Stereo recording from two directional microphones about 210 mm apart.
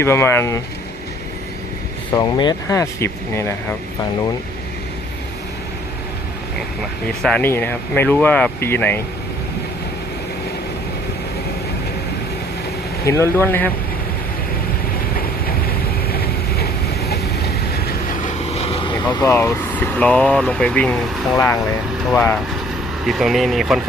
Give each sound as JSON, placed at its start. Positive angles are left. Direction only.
{"t": 0.0, "sound": "speech", "side_deg": 10}
{"t": 2.1, "sound": "speech", "side_deg": 20}
{"t": 7.2, "sound": "speech", "side_deg": 5}
{"t": 13.1, "sound": "speech", "side_deg": 15}
{"t": 15.1, "sound": "vehicle", "side_deg": 45}
{"t": 18.5, "sound": "speech", "side_deg": 30}